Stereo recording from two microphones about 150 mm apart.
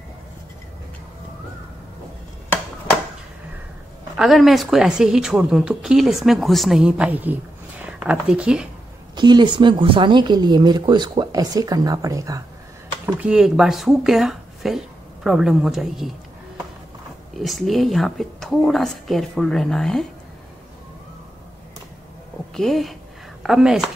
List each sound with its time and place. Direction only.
4.2 s a woman's voice: centre (ahead or behind)
9.1 s speech: 30° right (ahead or behind)
13.0 s a woman's voice: 5° right (ahead or behind)
17.4 s a woman's voice: centre (ahead or behind)
22.6 s a woman's voice: centre (ahead or behind)